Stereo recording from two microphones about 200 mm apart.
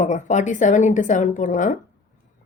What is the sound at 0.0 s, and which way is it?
A woman's voice, 35° left (ahead or behind).